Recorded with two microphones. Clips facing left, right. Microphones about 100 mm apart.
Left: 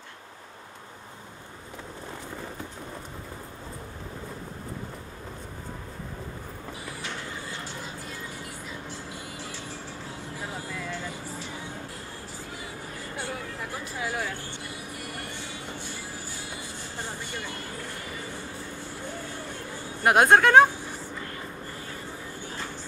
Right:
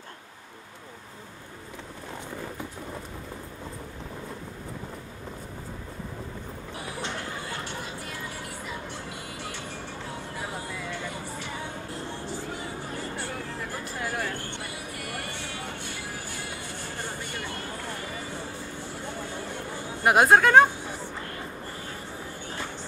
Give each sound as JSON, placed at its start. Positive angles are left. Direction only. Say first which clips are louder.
{"t": 10.9, "sound": "music", "louder": "right 1 dB", "side_deg": -60}
{"t": 13.9, "sound": "a sound", "louder": "even", "side_deg": 0}
{"t": 15.1, "sound": "music", "louder": "right 2 dB", "side_deg": -65}
{"t": 20.0, "sound": "speech", "louder": "even", "side_deg": 0}